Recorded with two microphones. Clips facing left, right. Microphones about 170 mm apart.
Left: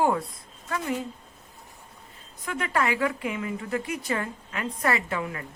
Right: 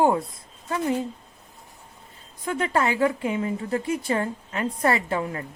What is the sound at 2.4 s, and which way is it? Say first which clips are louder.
A woman's voice: right 3 dB; 30° right (ahead or behind).